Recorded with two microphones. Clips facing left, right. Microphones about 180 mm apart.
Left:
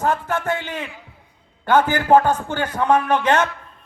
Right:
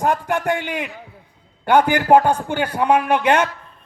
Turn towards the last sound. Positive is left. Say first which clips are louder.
# right 1 dB
turn(degrees=-10)  # may be behind; listen again after turning